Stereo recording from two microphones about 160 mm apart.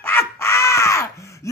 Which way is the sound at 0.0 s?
15° left (ahead or behind).